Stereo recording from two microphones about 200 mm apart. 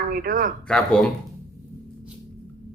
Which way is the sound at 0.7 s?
5° left (ahead or behind).